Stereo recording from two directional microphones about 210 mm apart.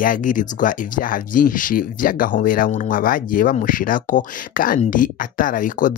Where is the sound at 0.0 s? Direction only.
40° left (ahead or behind).